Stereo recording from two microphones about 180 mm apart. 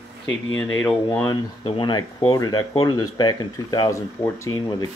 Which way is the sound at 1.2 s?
25° left (ahead or behind).